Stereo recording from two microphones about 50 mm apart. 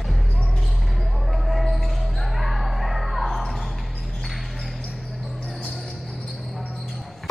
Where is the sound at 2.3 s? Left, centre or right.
Centre.